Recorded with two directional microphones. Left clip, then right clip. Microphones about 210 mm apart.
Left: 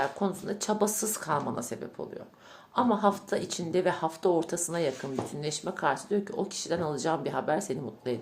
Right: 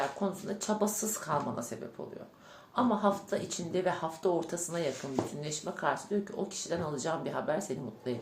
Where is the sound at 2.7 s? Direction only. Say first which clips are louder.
Left 3 dB; 45° left (ahead or behind).